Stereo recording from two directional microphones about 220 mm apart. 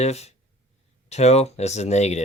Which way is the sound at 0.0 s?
30° left (ahead or behind).